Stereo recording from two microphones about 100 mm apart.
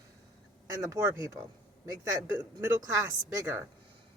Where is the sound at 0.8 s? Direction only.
30° right (ahead or behind).